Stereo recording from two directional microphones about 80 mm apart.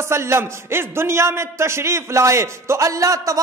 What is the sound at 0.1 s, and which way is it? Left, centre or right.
A man's voice, right.